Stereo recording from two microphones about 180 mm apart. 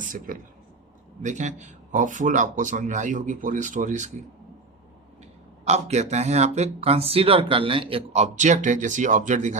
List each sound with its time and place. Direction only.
0.0 s speech: 45° right (ahead or behind)
5.6 s speech: 40° right (ahead or behind)